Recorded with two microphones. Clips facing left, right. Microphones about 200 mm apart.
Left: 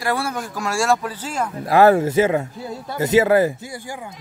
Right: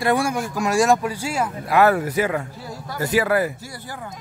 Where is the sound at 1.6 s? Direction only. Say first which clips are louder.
Left 4 dB; 30° left (ahead or behind).